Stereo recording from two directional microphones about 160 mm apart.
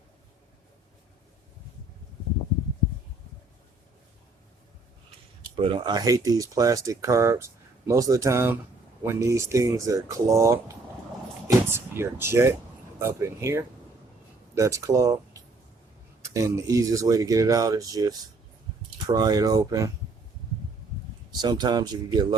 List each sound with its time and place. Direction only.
5.5 s speech: 30° right (ahead or behind)
21.4 s speech: 25° right (ahead or behind)